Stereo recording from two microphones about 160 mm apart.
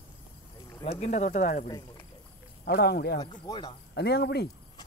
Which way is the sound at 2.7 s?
90° left.